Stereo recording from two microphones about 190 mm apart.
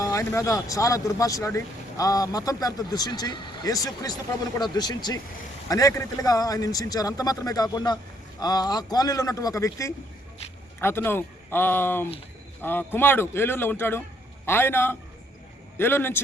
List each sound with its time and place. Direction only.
0.0 s a man's voice: 15° left (ahead or behind)